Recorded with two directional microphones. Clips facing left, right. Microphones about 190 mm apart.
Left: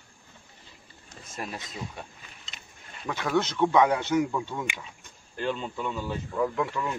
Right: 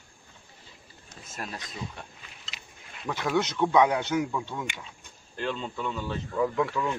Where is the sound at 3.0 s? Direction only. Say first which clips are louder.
Even; centre (ahead or behind).